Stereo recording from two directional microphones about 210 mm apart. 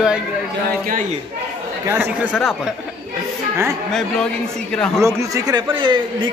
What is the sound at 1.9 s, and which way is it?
Speech, 10° right (ahead or behind).